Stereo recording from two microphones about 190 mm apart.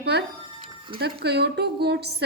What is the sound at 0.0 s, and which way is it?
A woman's voice, 60° right (ahead or behind).